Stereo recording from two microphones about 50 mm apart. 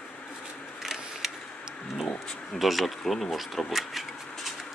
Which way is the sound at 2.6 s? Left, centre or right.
Centre.